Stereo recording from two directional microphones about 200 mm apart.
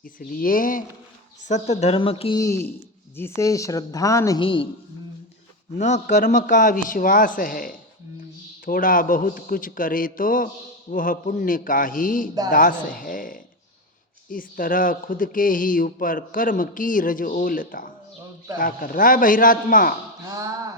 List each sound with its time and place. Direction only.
0.0 s speech: 45° left (ahead or behind)
1.6 s a sound: 35° left (ahead or behind)
2.4 s a woman's voice: 15° left (ahead or behind)
5.7 s speech: 35° left (ahead or behind)